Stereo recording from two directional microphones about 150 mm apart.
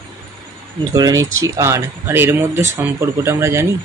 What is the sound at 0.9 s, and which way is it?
Speech, 25° right (ahead or behind).